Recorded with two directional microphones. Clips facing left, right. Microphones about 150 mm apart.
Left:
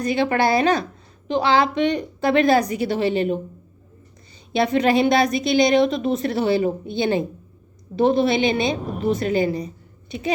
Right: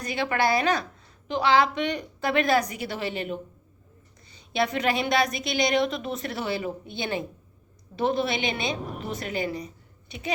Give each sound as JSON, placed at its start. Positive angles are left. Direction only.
{"t": 0.0, "sound": "a woman's voice", "side_deg": 30}
{"t": 4.5, "sound": "a woman's voice", "side_deg": 30}